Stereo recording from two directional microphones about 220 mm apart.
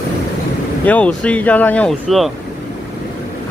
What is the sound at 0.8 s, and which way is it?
Speech, 5° left (ahead or behind).